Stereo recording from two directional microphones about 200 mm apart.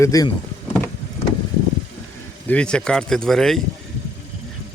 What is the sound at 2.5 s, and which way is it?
Speech, 5° left (ahead or behind).